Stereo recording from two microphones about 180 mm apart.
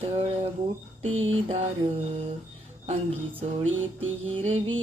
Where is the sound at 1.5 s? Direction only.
30° right (ahead or behind).